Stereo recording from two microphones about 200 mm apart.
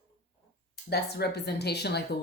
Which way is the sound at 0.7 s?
55° left (ahead or behind).